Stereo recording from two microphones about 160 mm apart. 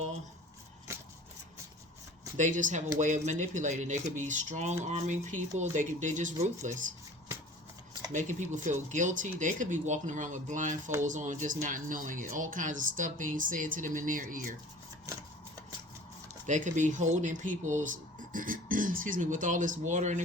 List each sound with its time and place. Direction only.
2.3 s speech: 50° right (ahead or behind)
8.1 s speech: 50° right (ahead or behind)
16.5 s speech: 50° right (ahead or behind)